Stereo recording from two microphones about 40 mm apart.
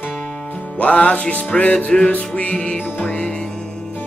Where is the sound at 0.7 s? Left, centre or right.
Left.